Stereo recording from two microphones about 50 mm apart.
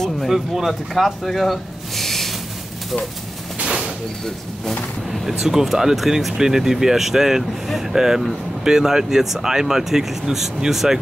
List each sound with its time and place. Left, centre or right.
0.3 s speech: centre
3.5 s a sound: right
5.1 s speech: centre